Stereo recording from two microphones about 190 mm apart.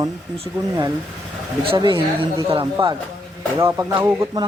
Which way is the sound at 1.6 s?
25° right (ahead or behind).